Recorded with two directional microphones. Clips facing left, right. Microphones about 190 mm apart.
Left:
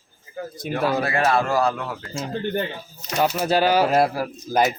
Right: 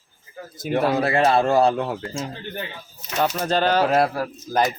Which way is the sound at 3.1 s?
10° left (ahead or behind).